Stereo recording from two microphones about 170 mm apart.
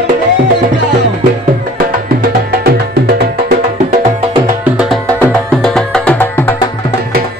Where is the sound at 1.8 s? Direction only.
60° right (ahead or behind).